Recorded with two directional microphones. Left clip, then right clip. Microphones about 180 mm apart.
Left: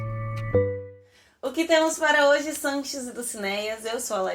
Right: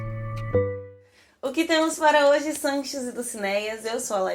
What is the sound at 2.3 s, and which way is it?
Speech, 15° right (ahead or behind).